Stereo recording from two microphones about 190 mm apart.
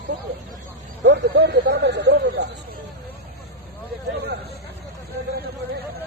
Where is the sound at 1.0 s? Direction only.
65° right (ahead or behind).